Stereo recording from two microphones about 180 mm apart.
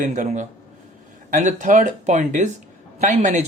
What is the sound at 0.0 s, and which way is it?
Speech, 45° right (ahead or behind).